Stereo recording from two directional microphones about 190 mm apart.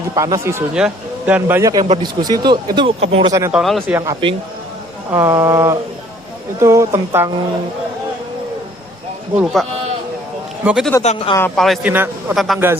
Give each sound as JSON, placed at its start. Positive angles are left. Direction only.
{"t": 0.2, "sound": "a man's voice", "side_deg": -15}
{"t": 3.5, "sound": "a man's voice", "side_deg": 0}
{"t": 3.8, "sound": "a man's voice", "side_deg": -15}
{"t": 9.4, "sound": "a man's voice", "side_deg": 0}
{"t": 11.0, "sound": "speech", "side_deg": 35}
{"t": 11.3, "sound": "a man's voice", "side_deg": 5}